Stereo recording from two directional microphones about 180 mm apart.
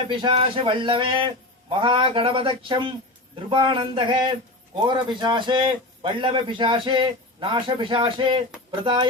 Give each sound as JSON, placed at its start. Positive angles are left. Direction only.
{"t": 0.1, "sound": "a man's voice", "side_deg": -30}